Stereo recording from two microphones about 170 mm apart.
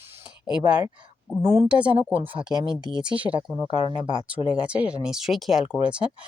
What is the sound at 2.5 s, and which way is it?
Speech, 25° right (ahead or behind).